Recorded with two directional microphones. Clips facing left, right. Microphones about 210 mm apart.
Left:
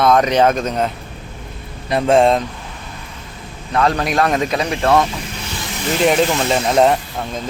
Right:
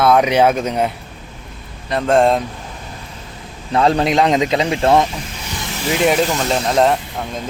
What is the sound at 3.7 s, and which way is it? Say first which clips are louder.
Speech: right 3 dB; 25° right (ahead or behind).